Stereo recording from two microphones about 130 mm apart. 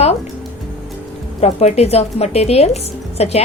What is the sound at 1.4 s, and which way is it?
A woman's voice, 55° left (ahead or behind).